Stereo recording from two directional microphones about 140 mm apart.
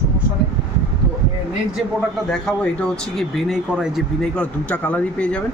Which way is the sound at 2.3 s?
5° left (ahead or behind).